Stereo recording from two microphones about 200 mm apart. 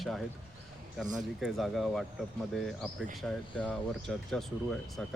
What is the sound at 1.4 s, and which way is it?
Speech, centre (ahead or behind).